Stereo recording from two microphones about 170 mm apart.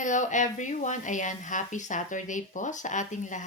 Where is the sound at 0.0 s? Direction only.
45° left (ahead or behind).